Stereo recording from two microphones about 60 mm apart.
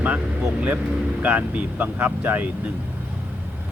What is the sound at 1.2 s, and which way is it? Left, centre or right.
Speech, right.